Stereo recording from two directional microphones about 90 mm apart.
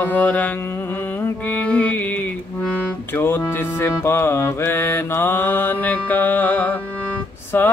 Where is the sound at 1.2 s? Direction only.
20° left (ahead or behind).